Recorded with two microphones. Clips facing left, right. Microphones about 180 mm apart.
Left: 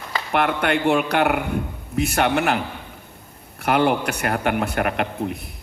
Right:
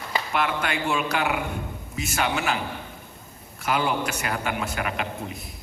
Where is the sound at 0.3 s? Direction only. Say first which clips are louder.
Left 7 dB; 60° left (ahead or behind).